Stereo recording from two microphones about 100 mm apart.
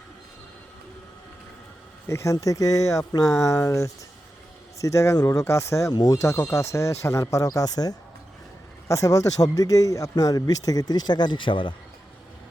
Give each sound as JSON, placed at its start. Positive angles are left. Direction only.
{"t": 2.0, "sound": "a man's voice", "side_deg": 30}